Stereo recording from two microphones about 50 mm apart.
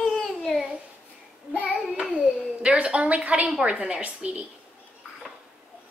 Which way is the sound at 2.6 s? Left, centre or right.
Right.